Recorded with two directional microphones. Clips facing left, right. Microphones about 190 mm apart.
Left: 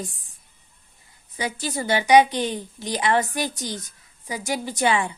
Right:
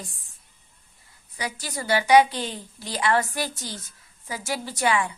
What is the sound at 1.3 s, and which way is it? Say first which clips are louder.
A woman's voice: left 5 dB; 25° left (ahead or behind).